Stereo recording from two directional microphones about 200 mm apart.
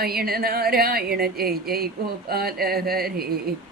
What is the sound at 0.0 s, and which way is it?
Speech, 50° right (ahead or behind).